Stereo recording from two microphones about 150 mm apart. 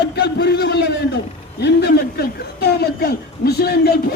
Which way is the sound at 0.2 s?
90° left.